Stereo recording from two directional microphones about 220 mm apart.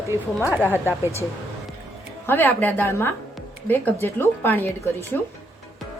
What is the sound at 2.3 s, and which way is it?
Speech, 10° left (ahead or behind).